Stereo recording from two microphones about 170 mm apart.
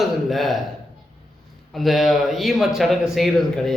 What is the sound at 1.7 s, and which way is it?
Speech, centre (ahead or behind).